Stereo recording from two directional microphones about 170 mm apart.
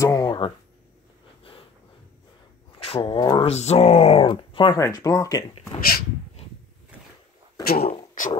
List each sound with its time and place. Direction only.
0.0 s a sound: 20° left (ahead or behind)
2.8 s speech: 35° left (ahead or behind)
4.3 s speech: 30° left (ahead or behind)
7.6 s speech: 65° left (ahead or behind)